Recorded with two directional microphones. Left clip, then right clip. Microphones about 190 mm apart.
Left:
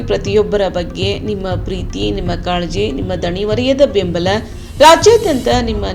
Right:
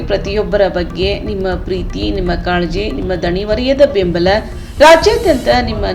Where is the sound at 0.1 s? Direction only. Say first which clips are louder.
Left 1 dB; 40° left (ahead or behind).